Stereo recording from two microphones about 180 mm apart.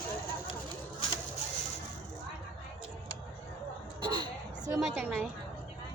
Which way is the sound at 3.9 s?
25° right (ahead or behind).